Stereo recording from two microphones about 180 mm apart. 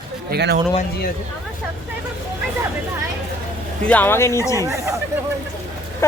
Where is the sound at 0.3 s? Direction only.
65° right (ahead or behind).